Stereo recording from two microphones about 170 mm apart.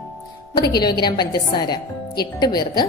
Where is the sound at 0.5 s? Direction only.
25° left (ahead or behind).